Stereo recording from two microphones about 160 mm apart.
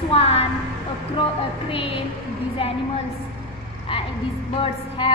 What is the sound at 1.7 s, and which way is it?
A woman's voice, 35° left (ahead or behind).